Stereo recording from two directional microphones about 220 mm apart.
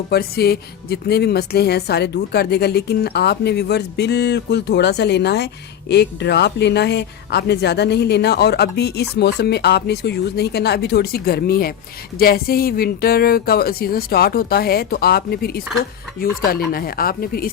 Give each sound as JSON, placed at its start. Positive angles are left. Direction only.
{"t": 0.1, "sound": "a woman's voice", "side_deg": 45}